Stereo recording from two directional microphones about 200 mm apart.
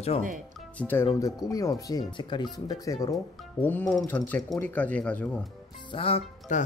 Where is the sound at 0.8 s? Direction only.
10° left (ahead or behind).